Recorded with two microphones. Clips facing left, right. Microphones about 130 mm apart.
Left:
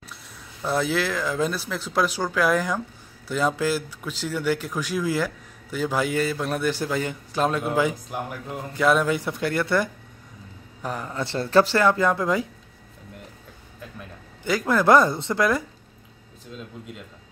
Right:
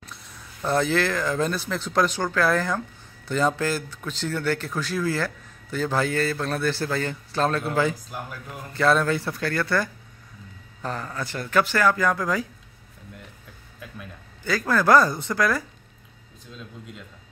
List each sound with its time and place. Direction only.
0.1 s speech: 5° left (ahead or behind); by 12.4 s 25° left (ahead or behind)
14.4 s speech: 20° left (ahead or behind)